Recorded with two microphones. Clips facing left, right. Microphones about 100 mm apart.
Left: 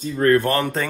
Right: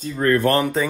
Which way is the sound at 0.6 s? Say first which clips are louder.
Right 2 dB; 5° right (ahead or behind).